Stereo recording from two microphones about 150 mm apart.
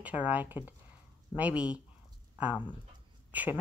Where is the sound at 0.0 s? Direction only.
10° right (ahead or behind).